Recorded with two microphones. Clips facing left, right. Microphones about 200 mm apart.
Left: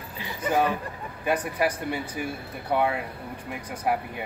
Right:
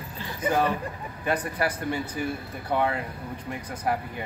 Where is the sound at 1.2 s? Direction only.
10° left (ahead or behind).